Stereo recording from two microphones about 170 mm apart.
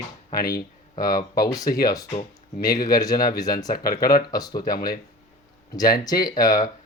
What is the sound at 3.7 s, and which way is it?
Speech, 60° left (ahead or behind).